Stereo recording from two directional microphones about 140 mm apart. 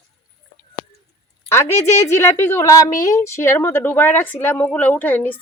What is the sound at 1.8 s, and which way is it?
A woman's voice, 20° left (ahead or behind).